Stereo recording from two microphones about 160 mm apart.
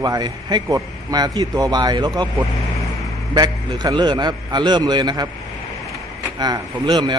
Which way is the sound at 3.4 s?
25° right (ahead or behind).